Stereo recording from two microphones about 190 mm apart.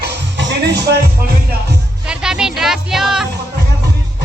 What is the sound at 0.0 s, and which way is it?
Music, 65° right (ahead or behind).